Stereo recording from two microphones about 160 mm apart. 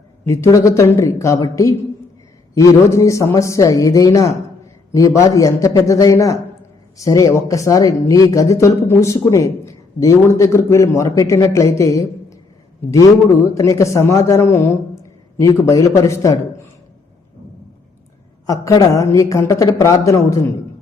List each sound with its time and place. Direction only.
0.3 s speech: 20° left (ahead or behind)
18.4 s speech: 20° left (ahead or behind)